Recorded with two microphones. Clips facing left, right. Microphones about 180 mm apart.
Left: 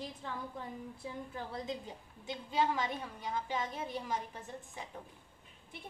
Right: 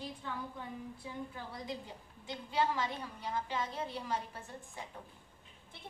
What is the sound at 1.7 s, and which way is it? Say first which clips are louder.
A woman's voice: left 2 dB; 20° left (ahead or behind).